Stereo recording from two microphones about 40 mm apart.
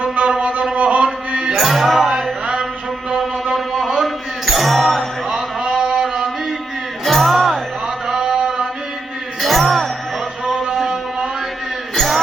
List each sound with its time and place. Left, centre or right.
0.0 s music: right
1.5 s music: centre
3.5 s a sound: centre
4.5 s music: centre
5.3 s a sound: centre
7.0 s music: centre
8.0 s a sound: centre
9.4 s music: centre
11.9 s music: centre